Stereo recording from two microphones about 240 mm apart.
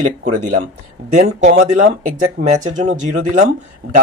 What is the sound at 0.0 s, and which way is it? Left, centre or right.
Speech, right.